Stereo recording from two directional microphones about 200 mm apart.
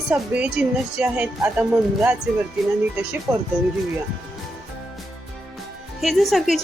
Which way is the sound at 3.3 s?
15° right (ahead or behind).